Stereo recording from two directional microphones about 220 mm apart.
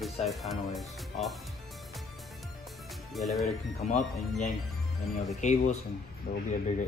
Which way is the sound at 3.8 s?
35° left (ahead or behind).